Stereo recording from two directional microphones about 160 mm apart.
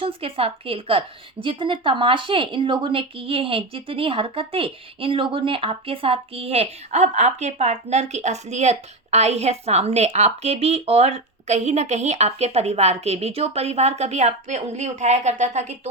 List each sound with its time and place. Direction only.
0.0 s a woman's voice: 35° right (ahead or behind)